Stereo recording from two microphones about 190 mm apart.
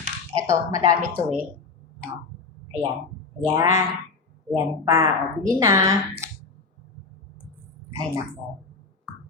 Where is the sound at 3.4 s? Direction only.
15° right (ahead or behind).